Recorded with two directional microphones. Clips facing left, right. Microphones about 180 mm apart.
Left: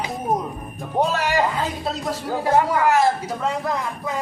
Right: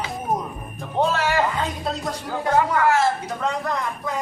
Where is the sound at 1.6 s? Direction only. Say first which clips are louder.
Left 1 dB; 5° left (ahead or behind).